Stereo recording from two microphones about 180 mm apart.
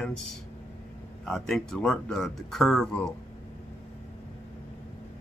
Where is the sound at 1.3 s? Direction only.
Centre (ahead or behind).